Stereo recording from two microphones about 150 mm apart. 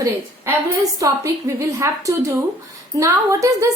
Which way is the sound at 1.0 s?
20° right (ahead or behind).